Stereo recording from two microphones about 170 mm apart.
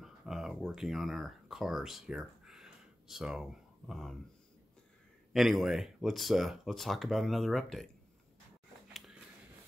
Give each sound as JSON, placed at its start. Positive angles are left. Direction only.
{"t": 0.0, "sound": "speech", "side_deg": 0}
{"t": 5.3, "sound": "speech", "side_deg": 0}
{"t": 8.8, "sound": "a sound", "side_deg": 0}